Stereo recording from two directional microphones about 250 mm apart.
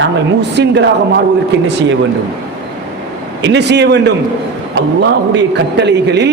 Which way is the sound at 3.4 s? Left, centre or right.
Right.